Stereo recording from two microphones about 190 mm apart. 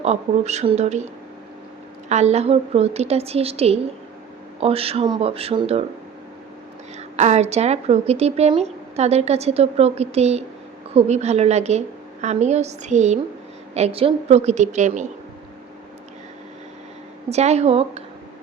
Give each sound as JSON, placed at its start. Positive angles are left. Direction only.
{"t": 0.0, "sound": "speech", "side_deg": -35}
{"t": 7.2, "sound": "speech", "side_deg": -35}
{"t": 17.2, "sound": "speech", "side_deg": -35}